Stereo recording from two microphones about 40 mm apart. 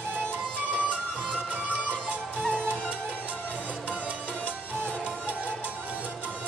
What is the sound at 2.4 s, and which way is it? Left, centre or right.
Music, left.